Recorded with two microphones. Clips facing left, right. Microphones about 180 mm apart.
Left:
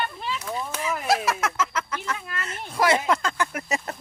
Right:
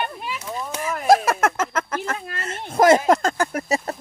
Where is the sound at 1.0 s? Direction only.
50° right (ahead or behind).